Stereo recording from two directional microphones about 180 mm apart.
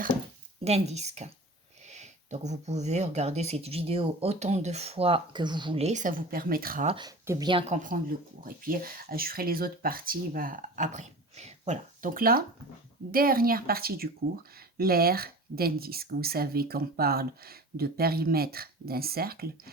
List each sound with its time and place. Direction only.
0.6 s speech: 35° right (ahead or behind); by 6.8 s 55° right (ahead or behind)
6.8 s a woman's voice: 30° right (ahead or behind)
7.7 s speech: 45° right (ahead or behind)